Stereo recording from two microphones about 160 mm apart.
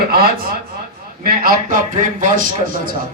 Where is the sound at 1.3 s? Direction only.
60° right (ahead or behind).